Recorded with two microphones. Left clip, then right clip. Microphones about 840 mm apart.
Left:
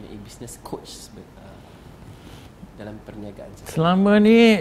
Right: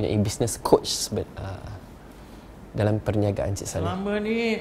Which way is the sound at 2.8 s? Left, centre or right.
Right.